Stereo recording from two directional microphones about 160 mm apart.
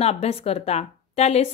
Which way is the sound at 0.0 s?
40° left (ahead or behind).